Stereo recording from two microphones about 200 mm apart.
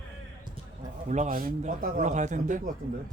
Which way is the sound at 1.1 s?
40° right (ahead or behind).